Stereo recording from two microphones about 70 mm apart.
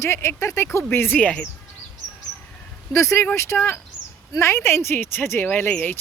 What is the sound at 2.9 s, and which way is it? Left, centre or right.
Speech, left.